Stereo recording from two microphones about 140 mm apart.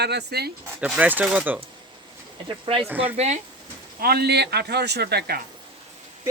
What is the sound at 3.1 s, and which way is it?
Speech, 55° right (ahead or behind).